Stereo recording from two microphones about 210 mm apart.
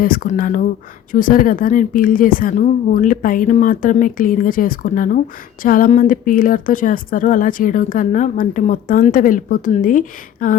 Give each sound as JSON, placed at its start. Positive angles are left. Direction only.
{"t": 0.0, "sound": "speech", "side_deg": 40}